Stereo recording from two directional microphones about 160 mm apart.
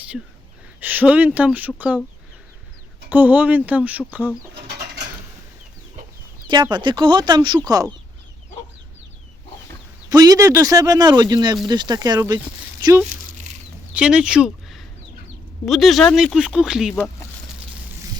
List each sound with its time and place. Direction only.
0.8 s speech: 10° right (ahead or behind)
3.1 s speech: 10° right (ahead or behind)
4.5 s bird: 90° right
6.5 s speech: 30° right (ahead or behind)
10.1 s speech: 20° right (ahead or behind)
13.9 s speech: 5° right (ahead or behind)